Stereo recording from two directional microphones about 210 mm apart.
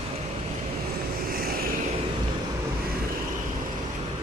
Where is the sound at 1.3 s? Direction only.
45° right (ahead or behind).